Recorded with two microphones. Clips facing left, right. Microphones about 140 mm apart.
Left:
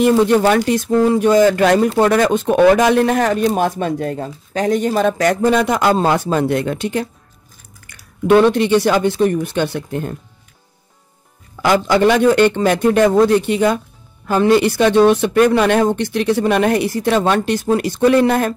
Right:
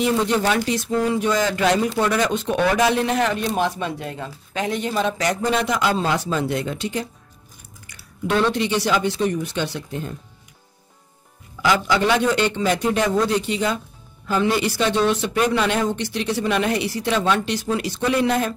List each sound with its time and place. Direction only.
0.2 s speech: 55° left (ahead or behind)
11.6 s speech: 50° left (ahead or behind)